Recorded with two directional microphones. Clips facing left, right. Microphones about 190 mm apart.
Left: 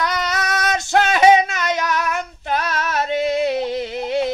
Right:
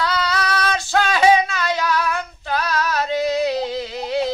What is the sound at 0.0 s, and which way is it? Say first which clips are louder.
Child singing: right 1 dB; 20° left (ahead or behind).